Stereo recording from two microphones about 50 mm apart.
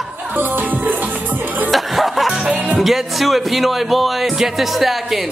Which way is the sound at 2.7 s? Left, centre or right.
Centre.